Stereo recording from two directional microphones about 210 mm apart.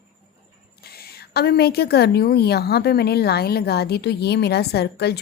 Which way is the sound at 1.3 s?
50° left (ahead or behind).